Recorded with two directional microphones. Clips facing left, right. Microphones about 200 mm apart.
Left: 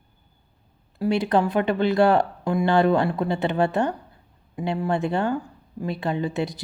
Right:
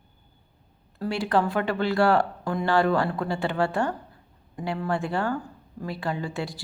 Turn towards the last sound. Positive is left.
turn(degrees=20)  # may be behind; listen again after turning